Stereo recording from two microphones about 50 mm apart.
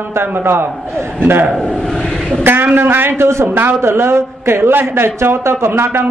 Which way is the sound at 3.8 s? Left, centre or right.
Right.